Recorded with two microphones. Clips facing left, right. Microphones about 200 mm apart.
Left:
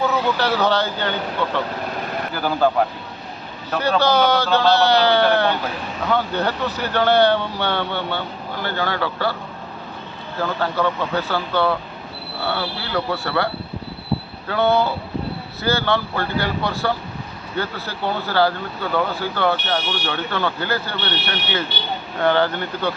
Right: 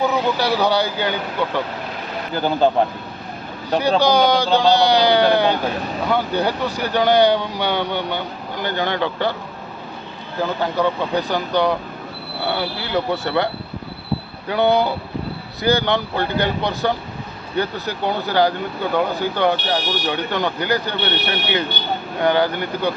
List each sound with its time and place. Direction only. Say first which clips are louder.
0.0 s speech: right 1 dB; 15° right (ahead or behind)
3.8 s speech: right 2 dB; 15° right (ahead or behind)
10.4 s speech: right 1 dB; 15° right (ahead or behind)
22.2 s speech: even; 15° right (ahead or behind)